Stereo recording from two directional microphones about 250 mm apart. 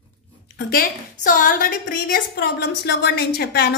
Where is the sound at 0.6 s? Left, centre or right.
Left.